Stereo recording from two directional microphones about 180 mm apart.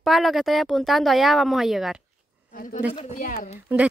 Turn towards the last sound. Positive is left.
turn(degrees=45)  # may be behind; listen again after turning